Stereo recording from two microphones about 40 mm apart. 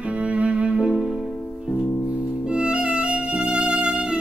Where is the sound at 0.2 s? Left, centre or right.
Right.